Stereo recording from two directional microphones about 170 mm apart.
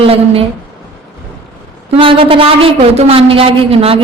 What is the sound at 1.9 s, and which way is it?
A woman's voice, 30° right (ahead or behind).